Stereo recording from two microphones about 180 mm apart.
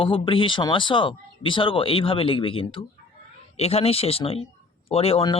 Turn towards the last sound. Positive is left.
turn(degrees=30)  # may be behind; listen again after turning